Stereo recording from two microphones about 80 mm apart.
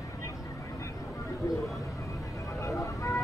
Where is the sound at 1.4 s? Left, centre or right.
Left.